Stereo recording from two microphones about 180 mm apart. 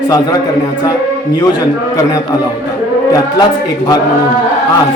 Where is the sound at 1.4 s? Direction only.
20° left (ahead or behind).